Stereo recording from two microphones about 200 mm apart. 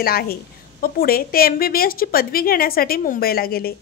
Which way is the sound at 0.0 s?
50° left (ahead or behind).